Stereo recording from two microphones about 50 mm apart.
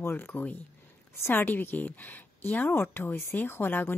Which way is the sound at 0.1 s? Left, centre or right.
Left.